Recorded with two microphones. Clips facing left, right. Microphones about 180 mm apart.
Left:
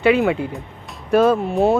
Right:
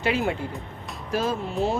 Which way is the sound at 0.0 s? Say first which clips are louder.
Left 9 dB; 65° left (ahead or behind).